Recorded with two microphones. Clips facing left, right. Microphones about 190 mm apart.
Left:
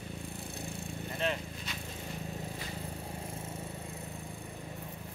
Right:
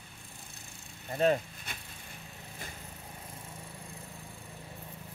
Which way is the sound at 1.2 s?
50° right (ahead or behind).